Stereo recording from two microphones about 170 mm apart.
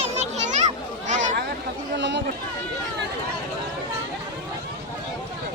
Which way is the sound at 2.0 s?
90° right.